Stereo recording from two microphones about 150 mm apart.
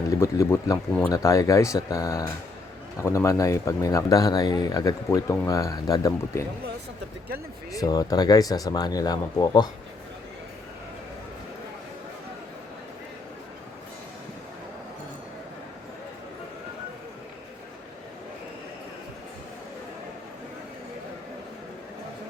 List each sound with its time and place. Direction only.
0.2 s speech: 20° left (ahead or behind)
7.7 s speech: 25° left (ahead or behind)